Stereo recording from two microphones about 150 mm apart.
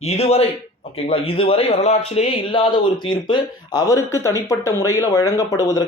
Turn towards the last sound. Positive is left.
turn(degrees=20)  # may be behind; listen again after turning